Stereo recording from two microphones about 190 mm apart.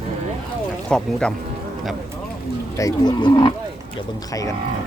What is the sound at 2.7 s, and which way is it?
Speech, 20° left (ahead or behind).